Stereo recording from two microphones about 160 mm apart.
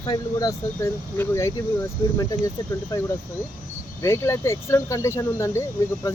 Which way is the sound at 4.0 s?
20° left (ahead or behind).